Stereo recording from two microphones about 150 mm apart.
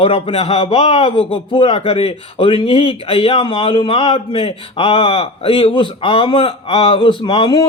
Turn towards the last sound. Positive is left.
turn(degrees=30)  # may be behind; listen again after turning